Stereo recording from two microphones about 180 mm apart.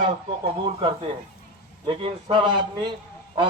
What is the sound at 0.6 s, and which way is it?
Speech, 30° right (ahead or behind).